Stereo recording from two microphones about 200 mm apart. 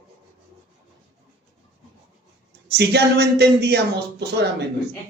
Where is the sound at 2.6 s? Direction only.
55° right (ahead or behind).